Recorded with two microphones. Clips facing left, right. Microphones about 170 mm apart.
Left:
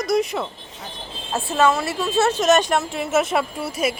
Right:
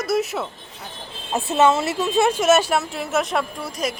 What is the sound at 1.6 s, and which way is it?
Speech, 20° right (ahead or behind).